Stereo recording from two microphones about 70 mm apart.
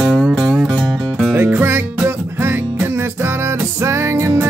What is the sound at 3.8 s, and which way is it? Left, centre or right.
Music, right.